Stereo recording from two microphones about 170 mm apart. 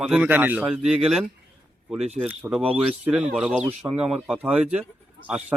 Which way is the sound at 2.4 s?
5° right (ahead or behind).